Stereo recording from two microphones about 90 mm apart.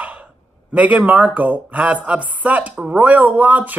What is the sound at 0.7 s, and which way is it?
Speech, 15° right (ahead or behind).